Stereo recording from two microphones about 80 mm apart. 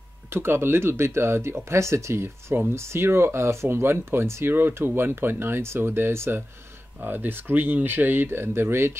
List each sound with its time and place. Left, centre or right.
0.3 s speech: right